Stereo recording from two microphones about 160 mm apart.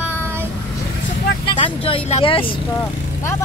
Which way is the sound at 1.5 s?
35° left (ahead or behind).